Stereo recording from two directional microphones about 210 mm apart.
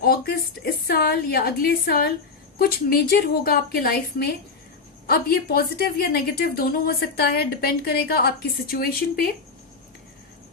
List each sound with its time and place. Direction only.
0.0 s a woman's voice: 45° left (ahead or behind)